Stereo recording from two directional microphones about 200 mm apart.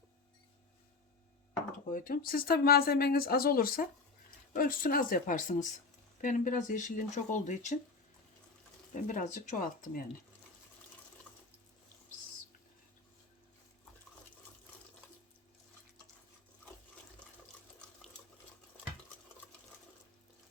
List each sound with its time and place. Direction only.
1.9 s speech: 45° left (ahead or behind)
8.9 s speech: 40° left (ahead or behind)